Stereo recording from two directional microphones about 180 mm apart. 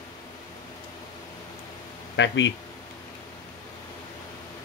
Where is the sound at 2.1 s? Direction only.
85° left.